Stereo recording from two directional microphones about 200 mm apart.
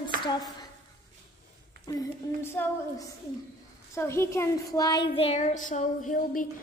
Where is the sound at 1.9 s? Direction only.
20° left (ahead or behind).